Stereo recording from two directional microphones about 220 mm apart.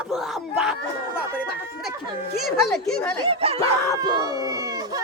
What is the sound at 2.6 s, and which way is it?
Speech, centre (ahead or behind).